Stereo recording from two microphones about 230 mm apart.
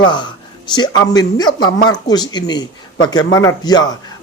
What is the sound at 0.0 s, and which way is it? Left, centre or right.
Speech, centre.